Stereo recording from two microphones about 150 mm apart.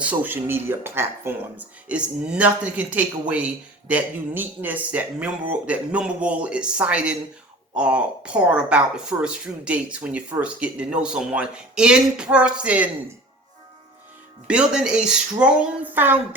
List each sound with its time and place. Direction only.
0.0 s speech: 10° right (ahead or behind)
14.4 s speech: 5° right (ahead or behind)